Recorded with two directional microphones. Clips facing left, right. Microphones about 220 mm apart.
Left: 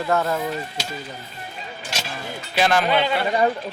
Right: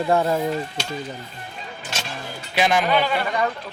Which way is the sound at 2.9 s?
20° left (ahead or behind).